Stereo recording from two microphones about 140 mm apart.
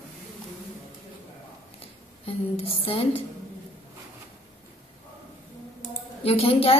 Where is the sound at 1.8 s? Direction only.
45° left (ahead or behind).